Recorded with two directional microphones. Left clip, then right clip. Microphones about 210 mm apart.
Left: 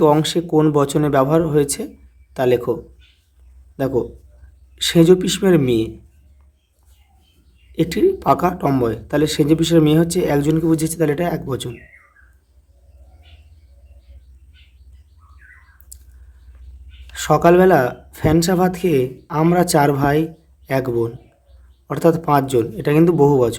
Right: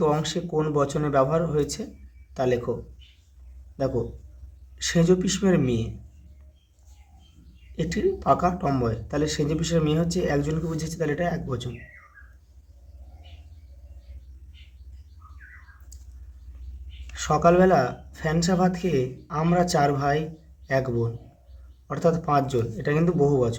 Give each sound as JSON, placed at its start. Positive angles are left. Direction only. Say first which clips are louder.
{"t": 0.0, "sound": "speech", "louder": "left 9 dB", "side_deg": 40}
{"t": 3.8, "sound": "speech", "louder": "left 7 dB", "side_deg": 40}
{"t": 7.8, "sound": "speech", "louder": "left 9 dB", "side_deg": 40}
{"t": 17.2, "sound": "speech", "louder": "left 6 dB", "side_deg": 40}